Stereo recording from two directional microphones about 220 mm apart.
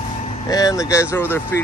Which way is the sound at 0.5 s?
15° left (ahead or behind).